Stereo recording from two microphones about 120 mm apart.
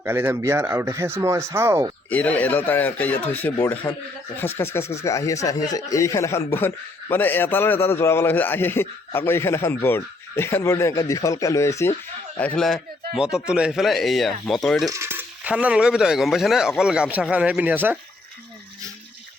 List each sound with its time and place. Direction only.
0.0 s speech: 20° right (ahead or behind)
2.0 s speech: 15° left (ahead or behind)
12.4 s speech: 15° left (ahead or behind)
12.6 s speech: 5° right (ahead or behind)
14.8 s coin: 25° right (ahead or behind)
15.4 s a man's voice: 10° right (ahead or behind)